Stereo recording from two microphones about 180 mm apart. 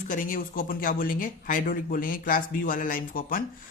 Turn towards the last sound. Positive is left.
turn(degrees=50)  # may be behind; listen again after turning